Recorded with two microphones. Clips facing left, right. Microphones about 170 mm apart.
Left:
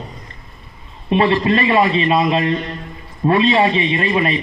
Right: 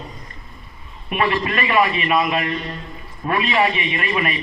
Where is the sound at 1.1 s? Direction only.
25° left (ahead or behind).